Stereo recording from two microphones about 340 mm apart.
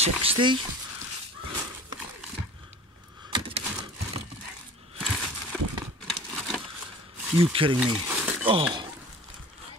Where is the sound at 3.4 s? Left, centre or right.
Centre.